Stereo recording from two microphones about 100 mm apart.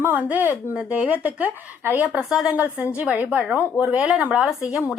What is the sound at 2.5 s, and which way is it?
A woman's voice, 15° right (ahead or behind).